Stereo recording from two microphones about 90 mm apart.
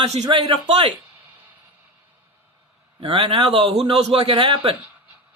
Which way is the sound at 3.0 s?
85° right.